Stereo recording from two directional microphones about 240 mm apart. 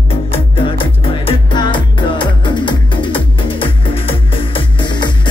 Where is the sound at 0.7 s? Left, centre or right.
Left.